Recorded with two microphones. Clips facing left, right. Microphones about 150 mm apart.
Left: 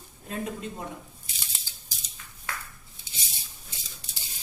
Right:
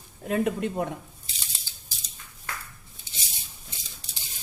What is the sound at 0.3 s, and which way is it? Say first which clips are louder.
Speech: right 8 dB; 65° right (ahead or behind).